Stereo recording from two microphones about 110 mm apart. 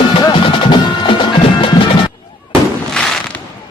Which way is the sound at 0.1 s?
45° left (ahead or behind).